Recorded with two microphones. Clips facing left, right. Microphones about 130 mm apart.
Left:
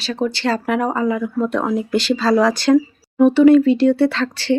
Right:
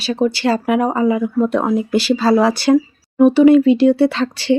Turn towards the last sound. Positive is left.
turn(degrees=-15)  # may be behind; listen again after turning